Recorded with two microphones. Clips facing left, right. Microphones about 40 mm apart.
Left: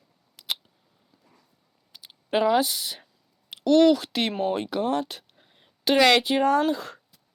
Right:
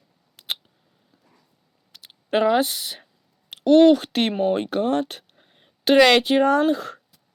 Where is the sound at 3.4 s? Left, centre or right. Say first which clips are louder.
Right 4 dB; right.